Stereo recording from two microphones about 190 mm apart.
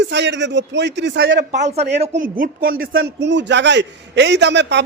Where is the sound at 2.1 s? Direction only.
45° right (ahead or behind); by 4.8 s 65° right (ahead or behind).